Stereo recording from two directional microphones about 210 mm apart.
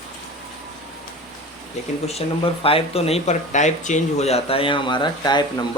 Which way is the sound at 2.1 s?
30° left (ahead or behind).